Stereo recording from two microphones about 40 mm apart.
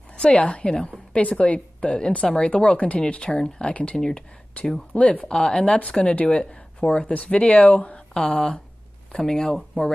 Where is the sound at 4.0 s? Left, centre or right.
Centre.